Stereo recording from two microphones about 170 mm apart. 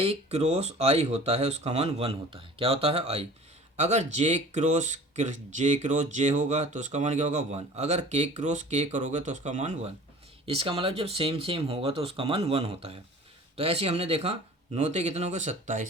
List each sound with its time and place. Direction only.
0.0 s speech: 35° right (ahead or behind)
10.4 s speech: 35° right (ahead or behind)